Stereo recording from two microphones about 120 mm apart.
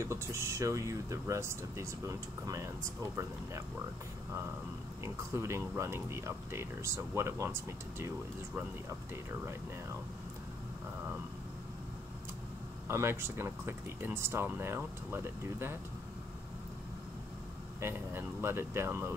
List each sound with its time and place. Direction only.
0.0 s speech: 25° right (ahead or behind)
5.0 s speech: 25° right (ahead or behind)
12.8 s speech: 20° right (ahead or behind)
17.7 s speech: 20° right (ahead or behind)